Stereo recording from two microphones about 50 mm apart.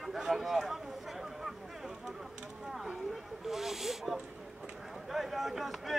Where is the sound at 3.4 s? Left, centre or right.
Centre.